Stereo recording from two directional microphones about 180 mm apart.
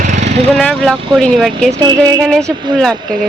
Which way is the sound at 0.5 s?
5° left (ahead or behind).